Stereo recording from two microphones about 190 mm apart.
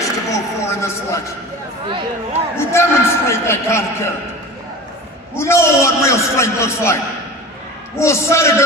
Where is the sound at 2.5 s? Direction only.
15° left (ahead or behind).